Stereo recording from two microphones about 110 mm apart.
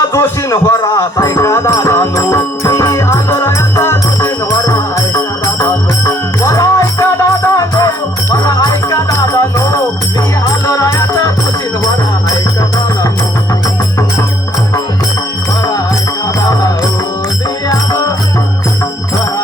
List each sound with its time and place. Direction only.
0.1 s music: 25° left (ahead or behind)
16.4 s music: 35° left (ahead or behind)